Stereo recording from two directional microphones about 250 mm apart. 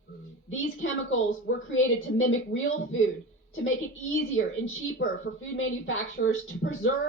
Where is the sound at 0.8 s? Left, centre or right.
Left.